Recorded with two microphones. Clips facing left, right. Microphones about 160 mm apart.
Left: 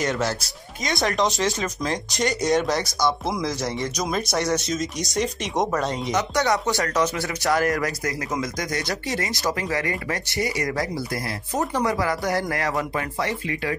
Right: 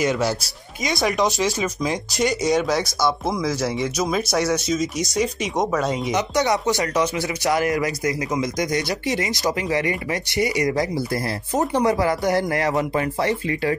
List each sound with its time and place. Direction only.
0.0 s speech: 10° right (ahead or behind); by 13.7 s 30° right (ahead or behind)